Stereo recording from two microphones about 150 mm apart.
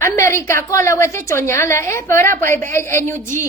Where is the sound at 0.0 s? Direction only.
20° left (ahead or behind).